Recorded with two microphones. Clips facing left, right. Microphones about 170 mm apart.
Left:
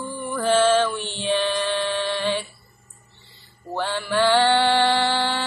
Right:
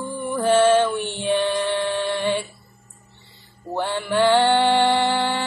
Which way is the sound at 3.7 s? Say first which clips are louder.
Right 2 dB; 15° right (ahead or behind).